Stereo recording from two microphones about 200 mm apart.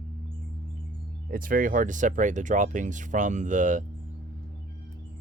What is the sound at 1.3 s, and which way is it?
Speech, 45° right (ahead or behind).